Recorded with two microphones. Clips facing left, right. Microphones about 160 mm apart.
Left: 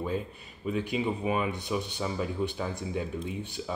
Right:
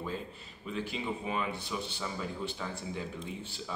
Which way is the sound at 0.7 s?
15° left (ahead or behind).